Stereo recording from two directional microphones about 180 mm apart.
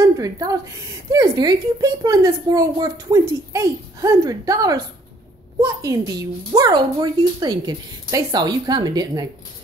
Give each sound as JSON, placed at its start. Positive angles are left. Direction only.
{"t": 0.0, "sound": "a woman's voice", "side_deg": -20}